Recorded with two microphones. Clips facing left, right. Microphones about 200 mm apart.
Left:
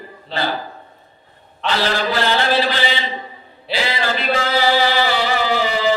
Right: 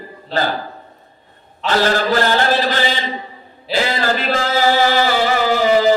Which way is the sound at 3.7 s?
45° right (ahead or behind).